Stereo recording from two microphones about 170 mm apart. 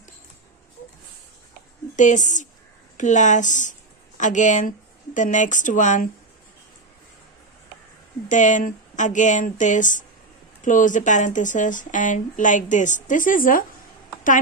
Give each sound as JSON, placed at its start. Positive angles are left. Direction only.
{"t": 2.0, "sound": "speech", "side_deg": 45}
{"t": 8.3, "sound": "speech", "side_deg": 50}